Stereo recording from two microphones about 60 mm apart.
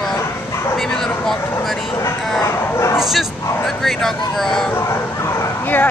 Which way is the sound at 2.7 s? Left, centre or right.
Left.